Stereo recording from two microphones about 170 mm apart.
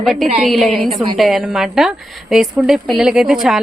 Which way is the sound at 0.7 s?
35° right (ahead or behind).